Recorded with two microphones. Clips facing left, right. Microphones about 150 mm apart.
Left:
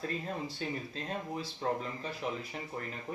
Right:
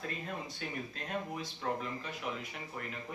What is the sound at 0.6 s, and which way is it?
Speech, 30° left (ahead or behind).